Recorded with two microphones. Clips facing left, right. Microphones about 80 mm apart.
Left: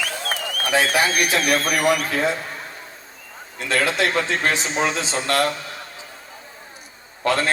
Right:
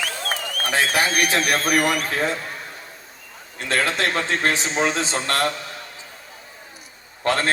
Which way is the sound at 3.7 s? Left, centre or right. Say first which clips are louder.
Left 1 dB; right.